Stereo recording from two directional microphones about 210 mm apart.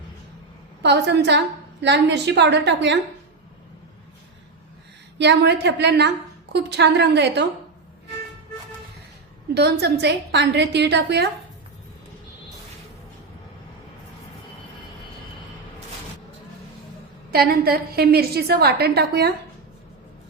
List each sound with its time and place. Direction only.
0.8 s a woman's voice: 55° right (ahead or behind)
5.1 s a woman's voice: 55° right (ahead or behind)
9.6 s a woman's voice: 50° right (ahead or behind)
17.3 s a woman's voice: 45° right (ahead or behind)